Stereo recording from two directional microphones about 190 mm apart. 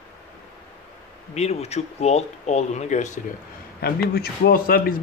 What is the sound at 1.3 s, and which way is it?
Speech, 35° left (ahead or behind).